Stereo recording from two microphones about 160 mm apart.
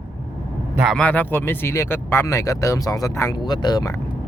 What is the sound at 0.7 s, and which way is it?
Speech, centre (ahead or behind).